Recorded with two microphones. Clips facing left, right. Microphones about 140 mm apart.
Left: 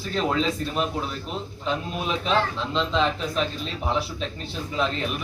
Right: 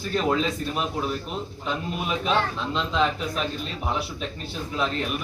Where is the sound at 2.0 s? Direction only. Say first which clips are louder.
Even; 5° right (ahead or behind).